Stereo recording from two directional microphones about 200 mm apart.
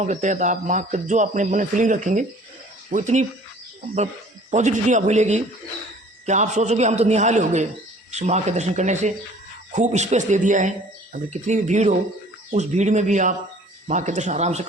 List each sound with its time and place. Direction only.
0.0 s speech: 35° right (ahead or behind)
4.5 s speech: 35° right (ahead or behind)